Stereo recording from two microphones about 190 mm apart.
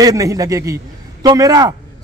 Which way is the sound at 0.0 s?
20° right (ahead or behind).